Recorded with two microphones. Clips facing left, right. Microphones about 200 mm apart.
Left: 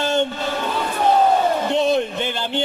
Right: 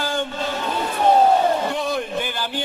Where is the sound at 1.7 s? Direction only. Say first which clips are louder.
Left 5 dB; 25° left (ahead or behind).